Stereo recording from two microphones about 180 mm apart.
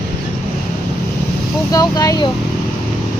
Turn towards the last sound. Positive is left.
turn(degrees=25)  # may be behind; listen again after turning